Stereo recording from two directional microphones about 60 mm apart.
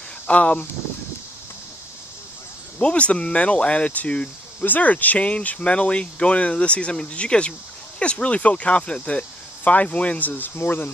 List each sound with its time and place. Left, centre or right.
0.3 s speech: left
2.8 s speech: centre; by 10.9 s left